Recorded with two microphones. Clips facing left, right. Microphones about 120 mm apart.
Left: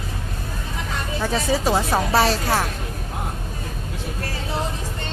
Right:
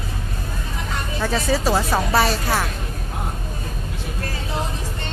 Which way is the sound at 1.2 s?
20° left (ahead or behind).